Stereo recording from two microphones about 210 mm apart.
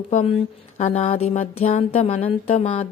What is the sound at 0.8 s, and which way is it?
Music, 30° left (ahead or behind).